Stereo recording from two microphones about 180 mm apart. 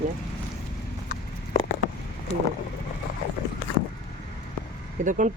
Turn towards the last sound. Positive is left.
turn(degrees=-45)  # may be behind; listen again after turning